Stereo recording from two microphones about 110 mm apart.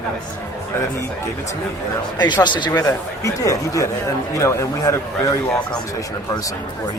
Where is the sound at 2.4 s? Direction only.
45° left (ahead or behind).